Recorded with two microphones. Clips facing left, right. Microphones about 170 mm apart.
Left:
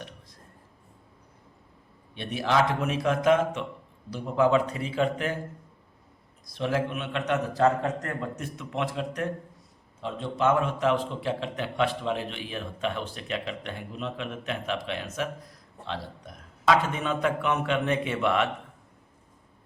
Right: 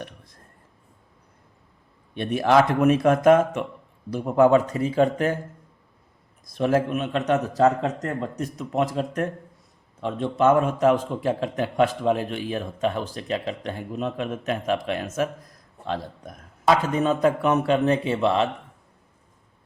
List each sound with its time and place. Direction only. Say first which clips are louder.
2.1 s a man's voice: right 6 dB; 50° right (ahead or behind)
6.4 s a man's voice: right 6 dB; 50° right (ahead or behind)
7.8 s a man's voice: right 4 dB; 30° right (ahead or behind)
10.0 s a man's voice: right 5 dB; 55° right (ahead or behind); by 18.4 s 30° right (ahead or behind)